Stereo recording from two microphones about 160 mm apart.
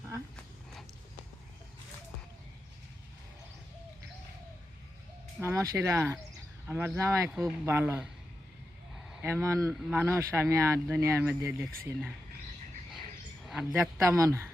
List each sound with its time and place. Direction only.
5.4 s speech: 15° right (ahead or behind)
7.3 s speech: centre (ahead or behind)
7.6 s speech: 15° right (ahead or behind)
9.2 s speech: 15° right (ahead or behind)
13.4 s a sound: centre (ahead or behind)
14.0 s speech: 20° right (ahead or behind)